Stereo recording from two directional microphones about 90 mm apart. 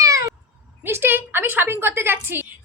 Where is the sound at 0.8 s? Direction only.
25° right (ahead or behind).